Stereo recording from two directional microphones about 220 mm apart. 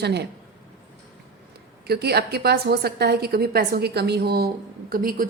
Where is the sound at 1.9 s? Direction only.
45° right (ahead or behind).